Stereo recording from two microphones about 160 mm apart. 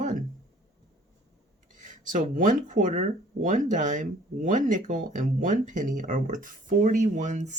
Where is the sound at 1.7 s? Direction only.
55° right (ahead or behind).